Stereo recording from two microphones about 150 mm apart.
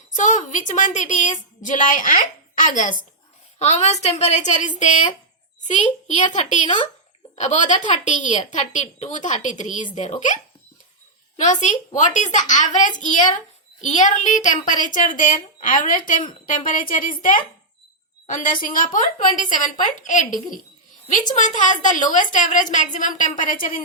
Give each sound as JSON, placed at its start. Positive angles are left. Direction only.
{"t": 0.2, "sound": "a woman's voice", "side_deg": 55}
{"t": 3.6, "sound": "a woman's voice", "side_deg": 50}
{"t": 11.3, "sound": "a woman's voice", "side_deg": 55}
{"t": 18.3, "sound": "a woman's voice", "side_deg": 65}
{"t": 21.3, "sound": "a woman's voice", "side_deg": 55}